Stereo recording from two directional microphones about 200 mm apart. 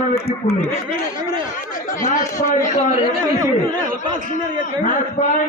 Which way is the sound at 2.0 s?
40° left (ahead or behind).